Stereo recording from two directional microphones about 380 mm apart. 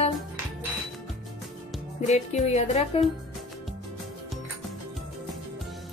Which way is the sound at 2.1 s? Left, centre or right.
Centre.